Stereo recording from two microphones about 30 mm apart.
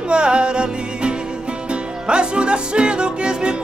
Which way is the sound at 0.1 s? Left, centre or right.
Right.